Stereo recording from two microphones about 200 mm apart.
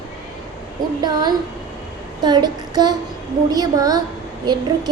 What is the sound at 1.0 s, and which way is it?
A woman's voice, 20° right (ahead or behind).